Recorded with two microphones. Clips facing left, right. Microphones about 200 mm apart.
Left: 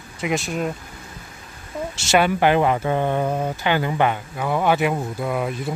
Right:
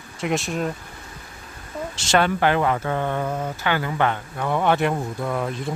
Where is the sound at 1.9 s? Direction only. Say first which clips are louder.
Left 2 dB; 10° left (ahead or behind).